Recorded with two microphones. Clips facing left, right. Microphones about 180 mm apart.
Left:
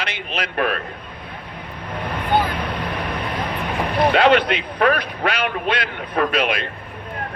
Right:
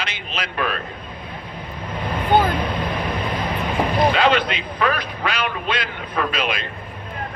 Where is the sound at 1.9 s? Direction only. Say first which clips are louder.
Right 2 dB; 65° left (ahead or behind).